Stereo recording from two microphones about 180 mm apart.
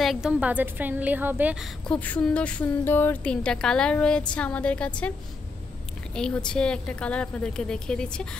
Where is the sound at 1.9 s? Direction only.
10° left (ahead or behind).